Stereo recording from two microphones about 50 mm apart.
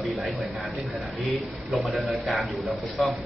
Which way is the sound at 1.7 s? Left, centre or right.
Centre.